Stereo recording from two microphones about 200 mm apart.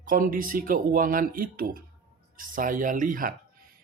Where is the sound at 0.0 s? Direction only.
45° right (ahead or behind).